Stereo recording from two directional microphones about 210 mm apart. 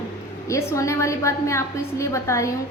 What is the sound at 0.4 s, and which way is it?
A woman's voice, 15° left (ahead or behind).